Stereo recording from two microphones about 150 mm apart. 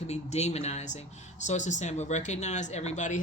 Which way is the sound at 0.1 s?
45° left (ahead or behind).